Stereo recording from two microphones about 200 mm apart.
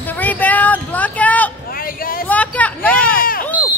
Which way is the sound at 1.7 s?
45° left (ahead or behind).